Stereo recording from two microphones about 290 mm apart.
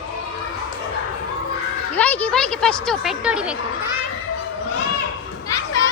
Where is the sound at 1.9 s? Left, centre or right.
Centre.